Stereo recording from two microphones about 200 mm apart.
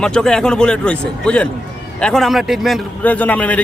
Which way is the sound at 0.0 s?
5° left (ahead or behind).